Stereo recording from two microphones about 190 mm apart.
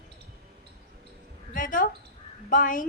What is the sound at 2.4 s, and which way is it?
Speech, 45° left (ahead or behind).